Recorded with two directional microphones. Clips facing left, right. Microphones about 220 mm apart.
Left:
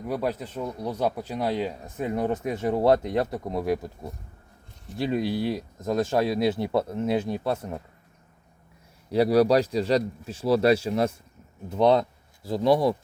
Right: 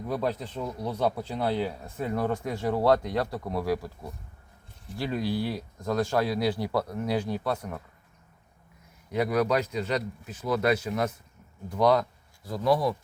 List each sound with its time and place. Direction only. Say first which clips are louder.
0.1 s speech: left 1 dB; 10° left (ahead or behind)
9.0 s speech: left 6 dB; 35° left (ahead or behind)